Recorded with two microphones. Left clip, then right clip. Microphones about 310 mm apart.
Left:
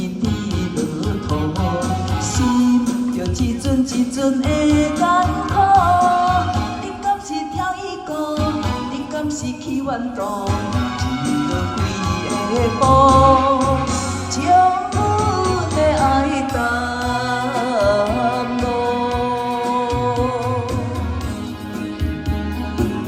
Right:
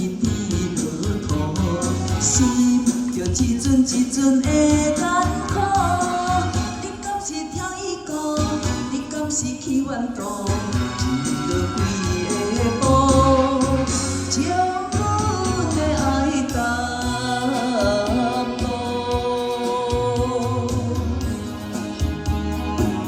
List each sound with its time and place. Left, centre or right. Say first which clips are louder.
2.4 s music: left 4 dB; centre
11.1 s music: left 2 dB; centre